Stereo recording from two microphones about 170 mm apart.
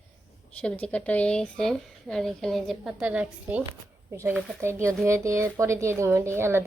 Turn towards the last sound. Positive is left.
turn(degrees=-15)  # may be behind; listen again after turning